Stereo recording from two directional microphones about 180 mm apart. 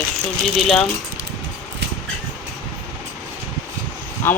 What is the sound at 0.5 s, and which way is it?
Speech, centre (ahead or behind).